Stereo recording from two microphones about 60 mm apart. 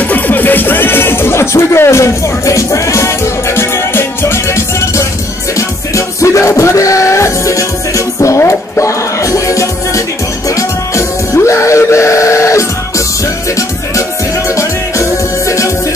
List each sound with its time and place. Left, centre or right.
0.0 s speech: left
5.6 s music: left
14.5 s music: left